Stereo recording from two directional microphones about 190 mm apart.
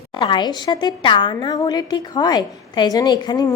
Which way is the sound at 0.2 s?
25° left (ahead or behind).